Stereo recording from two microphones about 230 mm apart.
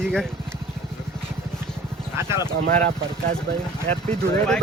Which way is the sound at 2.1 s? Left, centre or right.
Centre.